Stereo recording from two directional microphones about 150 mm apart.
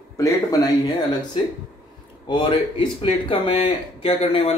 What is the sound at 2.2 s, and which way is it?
A man's voice, 30° left (ahead or behind).